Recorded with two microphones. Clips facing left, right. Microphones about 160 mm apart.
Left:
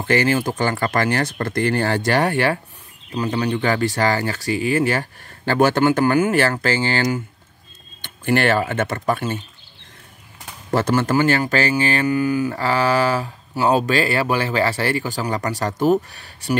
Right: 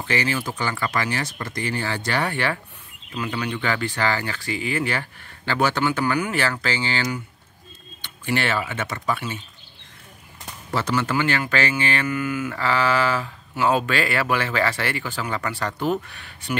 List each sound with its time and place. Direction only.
0.0 s speech: 45° left (ahead or behind)
10.7 s speech: 50° left (ahead or behind)